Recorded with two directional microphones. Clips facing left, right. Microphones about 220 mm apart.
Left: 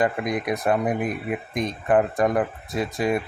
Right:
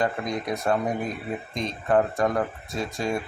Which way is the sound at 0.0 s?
20° left (ahead or behind).